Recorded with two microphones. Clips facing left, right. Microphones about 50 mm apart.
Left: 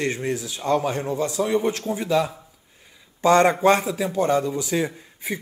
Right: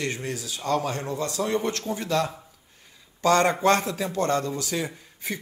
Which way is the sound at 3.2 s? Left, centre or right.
Left.